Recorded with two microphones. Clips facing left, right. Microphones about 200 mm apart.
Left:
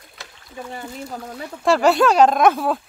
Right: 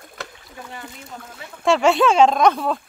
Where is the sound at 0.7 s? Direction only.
35° left (ahead or behind).